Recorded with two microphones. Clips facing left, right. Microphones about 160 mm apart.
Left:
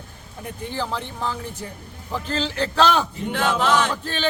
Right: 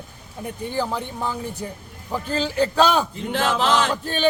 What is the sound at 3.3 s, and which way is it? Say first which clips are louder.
Chant: even; 30° right (ahead or behind).